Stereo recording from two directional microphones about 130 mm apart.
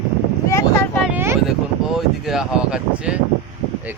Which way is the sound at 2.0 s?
5° right (ahead or behind).